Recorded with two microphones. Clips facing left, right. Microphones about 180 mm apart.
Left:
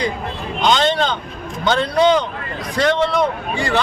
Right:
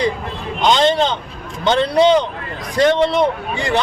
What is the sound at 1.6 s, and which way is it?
Speech, 20° right (ahead or behind).